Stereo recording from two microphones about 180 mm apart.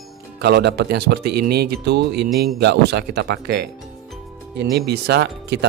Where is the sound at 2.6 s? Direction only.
70° right (ahead or behind).